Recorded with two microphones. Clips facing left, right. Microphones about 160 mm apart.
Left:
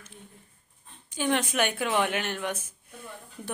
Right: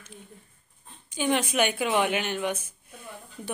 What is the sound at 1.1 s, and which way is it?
A woman's voice, centre (ahead or behind).